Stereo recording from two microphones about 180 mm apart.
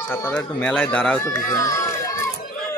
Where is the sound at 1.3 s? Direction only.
20° left (ahead or behind).